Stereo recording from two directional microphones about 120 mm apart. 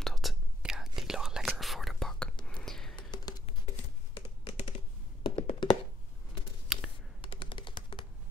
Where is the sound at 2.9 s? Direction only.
35° left (ahead or behind).